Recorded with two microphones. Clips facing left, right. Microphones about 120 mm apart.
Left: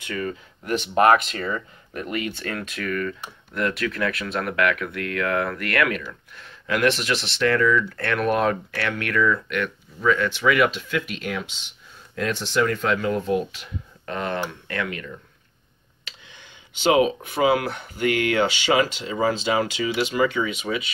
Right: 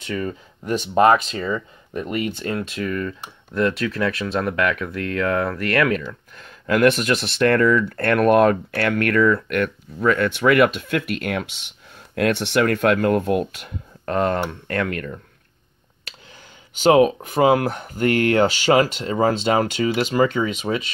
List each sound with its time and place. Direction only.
0.0 s speech: 30° right (ahead or behind); by 15.1 s 50° right (ahead or behind)
16.7 s speech: 45° right (ahead or behind)